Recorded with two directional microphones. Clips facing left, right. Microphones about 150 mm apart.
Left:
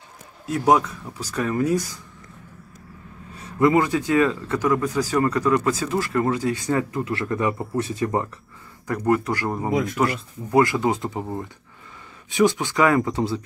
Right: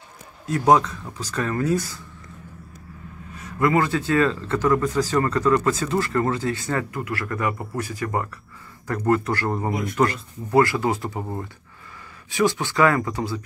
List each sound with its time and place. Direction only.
0.5 s speech: 10° left (ahead or behind)
3.3 s speech: 25° left (ahead or behind)
9.7 s speech: 90° left
9.9 s speech: 15° left (ahead or behind)
12.3 s speech: 20° left (ahead or behind)